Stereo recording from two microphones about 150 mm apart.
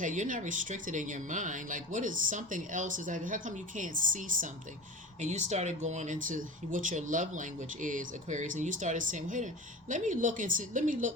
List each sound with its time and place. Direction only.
0.0 s speech: 60° right (ahead or behind)